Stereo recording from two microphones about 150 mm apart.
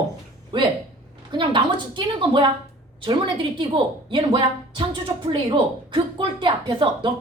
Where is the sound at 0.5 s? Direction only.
35° right (ahead or behind).